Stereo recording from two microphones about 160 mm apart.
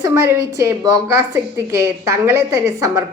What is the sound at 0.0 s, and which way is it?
A woman's voice, 20° right (ahead or behind).